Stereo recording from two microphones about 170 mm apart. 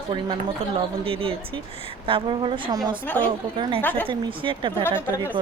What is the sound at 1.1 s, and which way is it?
Speech, 35° right (ahead or behind).